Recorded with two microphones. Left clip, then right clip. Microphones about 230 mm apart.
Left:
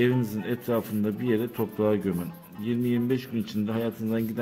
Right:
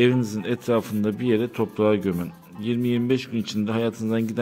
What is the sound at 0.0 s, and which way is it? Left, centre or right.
Speech, centre.